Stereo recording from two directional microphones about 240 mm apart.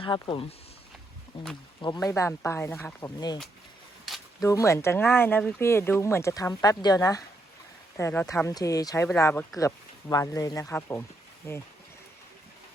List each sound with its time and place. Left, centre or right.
0.0 s speech: left
4.0 s a sound: centre
4.4 s speech: centre